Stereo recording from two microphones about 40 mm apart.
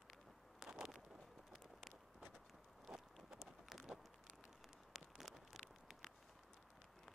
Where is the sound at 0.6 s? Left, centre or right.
Centre.